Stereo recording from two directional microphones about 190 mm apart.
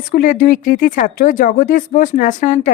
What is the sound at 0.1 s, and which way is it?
A woman's voice, 50° left (ahead or behind).